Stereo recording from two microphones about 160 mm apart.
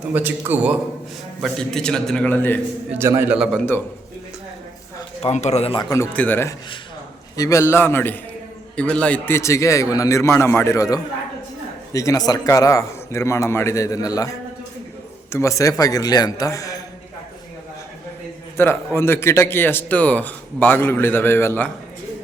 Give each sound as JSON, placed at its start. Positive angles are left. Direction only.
{"t": 0.1, "sound": "a man's voice", "side_deg": -15}
{"t": 1.4, "sound": "a man's voice", "side_deg": 0}
{"t": 2.9, "sound": "a man's voice", "side_deg": -15}
{"t": 3.3, "sound": "a man's voice", "side_deg": 0}
{"t": 5.2, "sound": "a man's voice", "side_deg": 45}
{"t": 5.7, "sound": "a man's voice", "side_deg": 25}
{"t": 6.1, "sound": "a man's voice", "side_deg": 10}
{"t": 15.3, "sound": "a man's voice", "side_deg": 20}
{"t": 18.5, "sound": "a man's voice", "side_deg": 15}